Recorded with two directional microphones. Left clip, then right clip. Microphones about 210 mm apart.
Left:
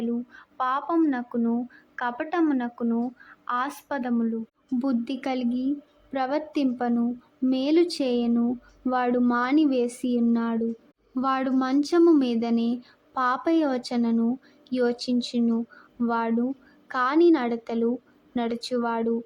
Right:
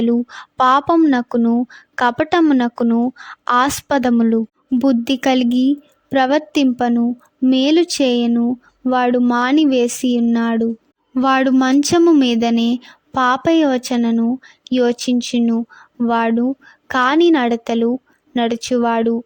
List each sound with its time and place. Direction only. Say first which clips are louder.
0.0 s a woman's voice: right 13 dB; 55° right (ahead or behind)
4.8 s a woman's voice: right 12 dB; 45° right (ahead or behind)